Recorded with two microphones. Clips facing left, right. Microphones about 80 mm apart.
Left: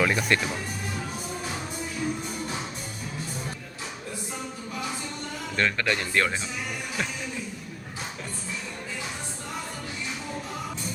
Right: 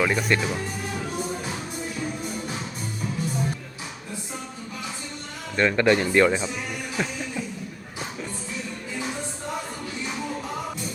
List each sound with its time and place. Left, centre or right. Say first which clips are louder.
0.0 s speech: right 1 dB; centre
5.5 s speech: right 7 dB; centre